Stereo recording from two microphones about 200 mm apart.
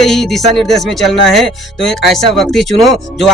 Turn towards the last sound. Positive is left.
turn(degrees=0)  # may be behind; listen again after turning